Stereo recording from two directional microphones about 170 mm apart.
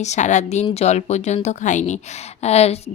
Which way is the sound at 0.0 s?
45° left (ahead or behind).